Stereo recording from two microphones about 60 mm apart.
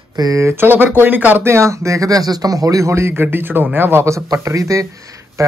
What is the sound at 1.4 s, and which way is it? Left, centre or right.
A man's voice, right.